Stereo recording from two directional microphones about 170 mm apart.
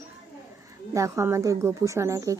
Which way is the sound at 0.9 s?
20° right (ahead or behind).